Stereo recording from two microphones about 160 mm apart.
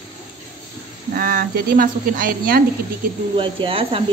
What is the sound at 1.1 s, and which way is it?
A woman's voice, 65° right (ahead or behind).